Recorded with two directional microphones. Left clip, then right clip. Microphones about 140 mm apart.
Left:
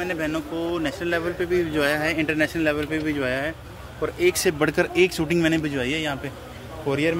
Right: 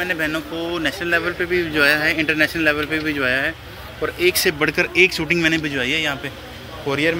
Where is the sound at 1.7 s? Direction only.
20° left (ahead or behind).